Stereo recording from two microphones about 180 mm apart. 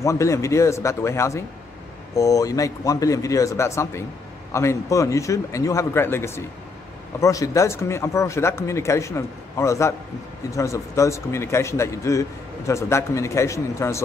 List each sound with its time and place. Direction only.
0.0 s a man's voice: 15° left (ahead or behind)